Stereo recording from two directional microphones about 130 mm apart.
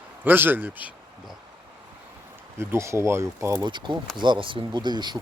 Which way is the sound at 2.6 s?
20° right (ahead or behind).